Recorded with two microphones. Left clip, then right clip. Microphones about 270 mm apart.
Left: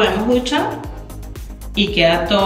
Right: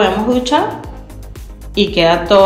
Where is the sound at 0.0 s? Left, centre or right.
Centre.